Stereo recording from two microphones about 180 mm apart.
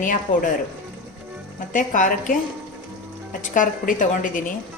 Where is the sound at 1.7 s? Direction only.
45° left (ahead or behind).